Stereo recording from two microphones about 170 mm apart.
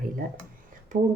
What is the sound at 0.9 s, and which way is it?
Speech, 55° right (ahead or behind).